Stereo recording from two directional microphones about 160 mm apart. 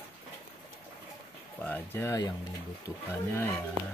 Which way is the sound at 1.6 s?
15° left (ahead or behind).